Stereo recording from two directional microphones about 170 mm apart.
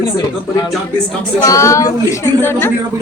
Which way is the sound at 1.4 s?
20° left (ahead or behind).